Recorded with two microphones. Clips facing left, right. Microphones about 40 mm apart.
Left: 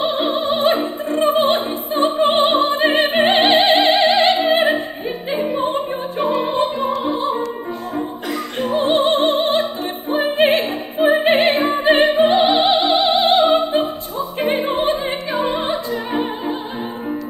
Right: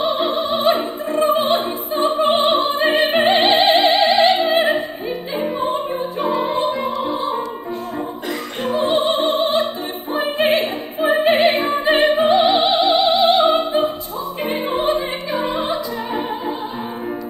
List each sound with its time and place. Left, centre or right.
0.0 s opera: left
8.7 s music: left
10.1 s opera: left
14.4 s music: left